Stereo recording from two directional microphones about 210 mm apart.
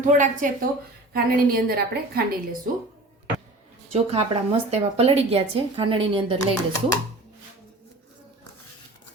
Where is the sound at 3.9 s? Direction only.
30° right (ahead or behind).